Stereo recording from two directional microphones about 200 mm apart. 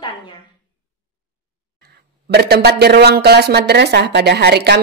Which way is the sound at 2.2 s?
55° right (ahead or behind).